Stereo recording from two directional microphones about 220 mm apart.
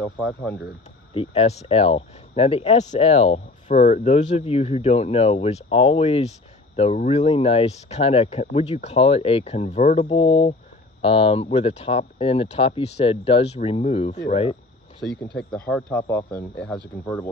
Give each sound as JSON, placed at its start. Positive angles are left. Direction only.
{"t": 0.0, "sound": "speech", "side_deg": 10}
{"t": 1.1, "sound": "speech", "side_deg": 25}
{"t": 15.0, "sound": "speech", "side_deg": -20}
{"t": 15.7, "sound": "speech", "side_deg": 10}